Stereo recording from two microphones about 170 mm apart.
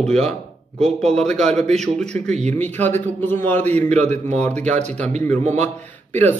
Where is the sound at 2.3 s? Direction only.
40° right (ahead or behind).